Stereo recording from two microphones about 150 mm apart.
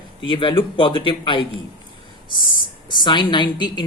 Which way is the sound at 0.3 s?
35° left (ahead or behind).